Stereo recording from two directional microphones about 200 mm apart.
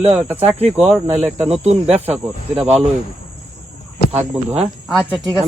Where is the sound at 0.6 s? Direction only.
30° right (ahead or behind).